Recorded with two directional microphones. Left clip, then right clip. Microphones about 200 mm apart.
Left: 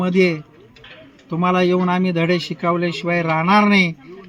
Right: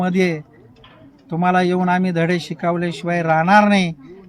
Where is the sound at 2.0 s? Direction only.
20° right (ahead or behind).